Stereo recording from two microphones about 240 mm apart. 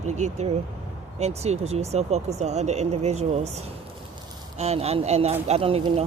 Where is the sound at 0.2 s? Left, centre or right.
Right.